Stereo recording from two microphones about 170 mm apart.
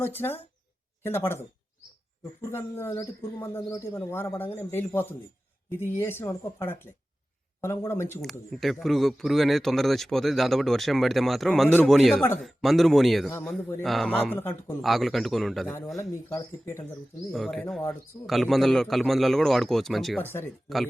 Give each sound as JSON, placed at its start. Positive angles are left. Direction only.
{"t": 0.0, "sound": "a man's voice", "side_deg": 10}
{"t": 2.5, "sound": "a man's voice", "side_deg": 15}
{"t": 8.2, "sound": "a man's voice", "side_deg": 0}
{"t": 14.8, "sound": "speech", "side_deg": 0}
{"t": 16.0, "sound": "speech", "side_deg": 20}
{"t": 17.3, "sound": "speech", "side_deg": 0}
{"t": 20.2, "sound": "a man's voice", "side_deg": 15}